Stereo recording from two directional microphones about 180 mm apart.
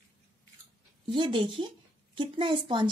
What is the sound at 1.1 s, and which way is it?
A woman's voice, 30° right (ahead or behind).